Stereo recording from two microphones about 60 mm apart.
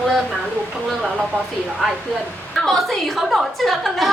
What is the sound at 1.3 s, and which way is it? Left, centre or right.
Speech, left.